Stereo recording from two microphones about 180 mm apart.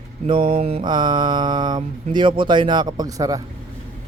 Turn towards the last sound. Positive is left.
turn(degrees=-20)  # may be behind; listen again after turning